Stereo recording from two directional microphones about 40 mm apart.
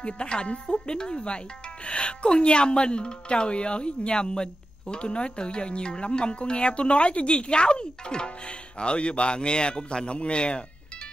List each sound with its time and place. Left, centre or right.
0.0 s a woman's voice: left